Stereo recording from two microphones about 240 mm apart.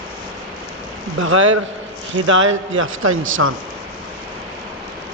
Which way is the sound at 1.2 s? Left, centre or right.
Right.